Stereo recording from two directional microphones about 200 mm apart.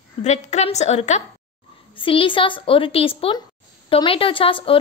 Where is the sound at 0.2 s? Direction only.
35° left (ahead or behind).